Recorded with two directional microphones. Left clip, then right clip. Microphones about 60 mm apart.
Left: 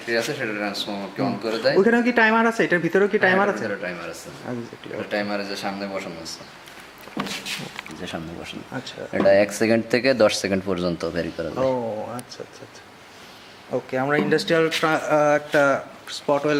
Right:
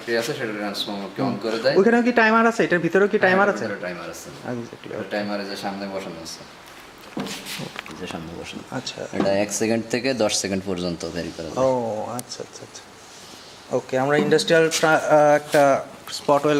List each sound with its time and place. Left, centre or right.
0.1 s a man's voice: centre
5.1 s a man's voice: centre
9.1 s speech: left
11.8 s speech: right
13.7 s speech: right